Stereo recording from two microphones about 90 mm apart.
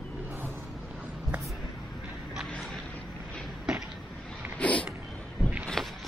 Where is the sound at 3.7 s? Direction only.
5° right (ahead or behind).